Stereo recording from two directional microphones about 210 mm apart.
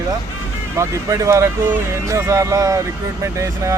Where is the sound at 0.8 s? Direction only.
15° right (ahead or behind).